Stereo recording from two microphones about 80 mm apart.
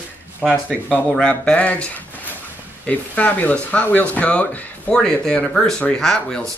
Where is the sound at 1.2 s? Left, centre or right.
Centre.